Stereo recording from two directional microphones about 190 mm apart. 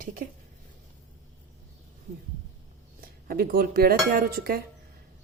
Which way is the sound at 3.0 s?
50° right (ahead or behind).